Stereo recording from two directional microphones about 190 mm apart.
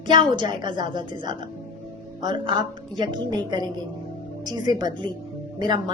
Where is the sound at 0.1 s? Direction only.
25° right (ahead or behind).